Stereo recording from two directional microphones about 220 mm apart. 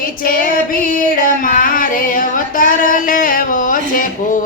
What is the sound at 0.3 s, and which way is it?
Female singing, 40° left (ahead or behind).